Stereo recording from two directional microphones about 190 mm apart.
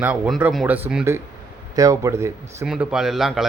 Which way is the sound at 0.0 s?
5° right (ahead or behind).